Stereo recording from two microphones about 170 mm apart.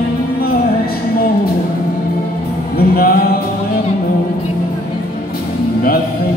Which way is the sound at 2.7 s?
60° left (ahead or behind).